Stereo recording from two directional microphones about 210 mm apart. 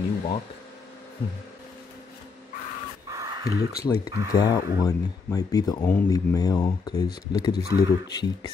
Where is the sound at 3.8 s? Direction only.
15° left (ahead or behind).